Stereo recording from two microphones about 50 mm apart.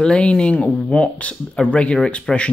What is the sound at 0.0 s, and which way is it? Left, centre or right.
Speech, centre.